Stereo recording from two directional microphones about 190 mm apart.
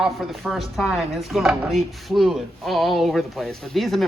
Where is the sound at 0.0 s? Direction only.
Centre (ahead or behind).